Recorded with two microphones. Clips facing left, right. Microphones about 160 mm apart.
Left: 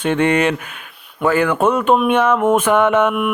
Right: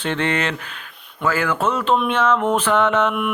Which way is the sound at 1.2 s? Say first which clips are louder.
Left 5 dB; 20° left (ahead or behind).